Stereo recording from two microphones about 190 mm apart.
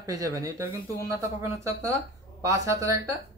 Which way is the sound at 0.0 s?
20° right (ahead or behind).